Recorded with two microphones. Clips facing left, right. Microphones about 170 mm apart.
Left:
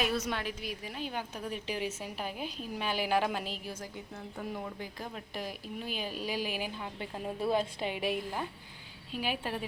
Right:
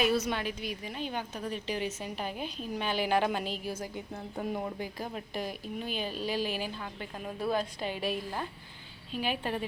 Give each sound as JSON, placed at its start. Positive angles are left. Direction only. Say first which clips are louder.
{"t": 0.0, "sound": "a woman's voice", "louder": "right 4 dB", "side_deg": 0}